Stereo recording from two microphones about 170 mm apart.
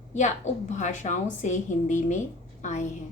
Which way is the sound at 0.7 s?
45° left (ahead or behind).